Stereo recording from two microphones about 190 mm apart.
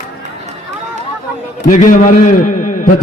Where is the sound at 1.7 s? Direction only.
40° left (ahead or behind).